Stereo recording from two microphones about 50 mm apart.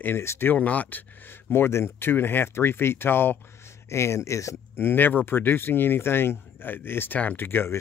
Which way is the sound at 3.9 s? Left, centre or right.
Left.